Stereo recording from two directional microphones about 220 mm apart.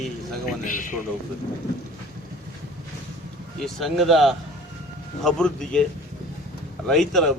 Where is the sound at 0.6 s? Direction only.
35° left (ahead or behind).